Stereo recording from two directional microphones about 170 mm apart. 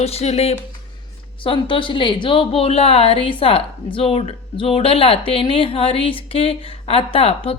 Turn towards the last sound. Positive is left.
turn(degrees=35)  # may be behind; listen again after turning